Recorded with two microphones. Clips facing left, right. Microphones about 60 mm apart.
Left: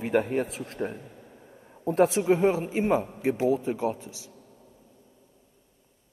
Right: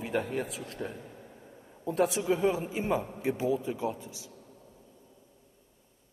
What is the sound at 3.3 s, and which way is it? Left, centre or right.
Speech, left.